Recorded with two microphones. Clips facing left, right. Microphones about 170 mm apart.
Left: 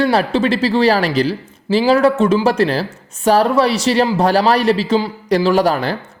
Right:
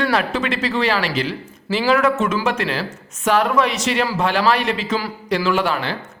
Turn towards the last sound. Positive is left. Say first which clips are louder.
# left 5 dB
turn(degrees=40)  # may be behind; listen again after turning